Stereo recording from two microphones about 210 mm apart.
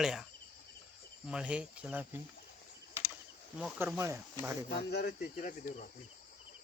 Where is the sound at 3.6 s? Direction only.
5° right (ahead or behind).